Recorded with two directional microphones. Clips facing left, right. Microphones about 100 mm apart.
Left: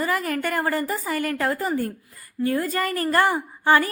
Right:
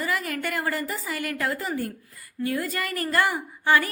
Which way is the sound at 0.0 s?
50° left (ahead or behind).